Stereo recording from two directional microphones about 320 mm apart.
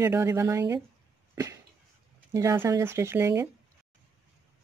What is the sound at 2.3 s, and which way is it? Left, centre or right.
Speech, centre.